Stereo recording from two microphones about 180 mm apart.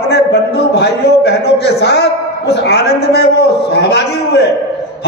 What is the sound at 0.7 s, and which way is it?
A man's voice, 65° left (ahead or behind).